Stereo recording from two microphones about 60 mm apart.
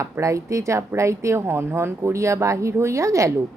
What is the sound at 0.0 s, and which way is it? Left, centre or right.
Speech, right.